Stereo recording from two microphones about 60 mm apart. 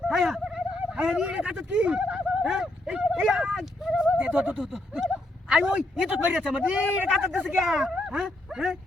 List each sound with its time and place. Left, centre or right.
0.1 s a man's voice: centre
3.9 s a man's voice: centre
7.4 s speech: centre
8.0 s dog: centre